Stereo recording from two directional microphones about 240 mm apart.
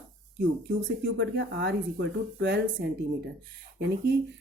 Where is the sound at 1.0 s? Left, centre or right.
Right.